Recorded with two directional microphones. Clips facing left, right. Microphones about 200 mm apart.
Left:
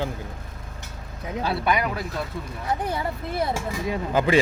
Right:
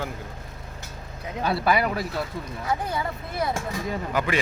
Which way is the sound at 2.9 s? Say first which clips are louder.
Left 2 dB; 30° left (ahead or behind).